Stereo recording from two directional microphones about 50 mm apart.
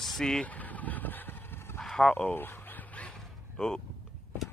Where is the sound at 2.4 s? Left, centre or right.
Left.